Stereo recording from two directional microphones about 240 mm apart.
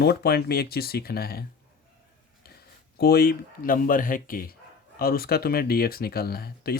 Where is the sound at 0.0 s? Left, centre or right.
Left.